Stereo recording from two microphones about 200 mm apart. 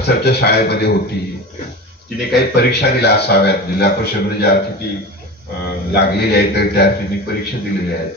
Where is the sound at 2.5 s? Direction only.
55° left (ahead or behind).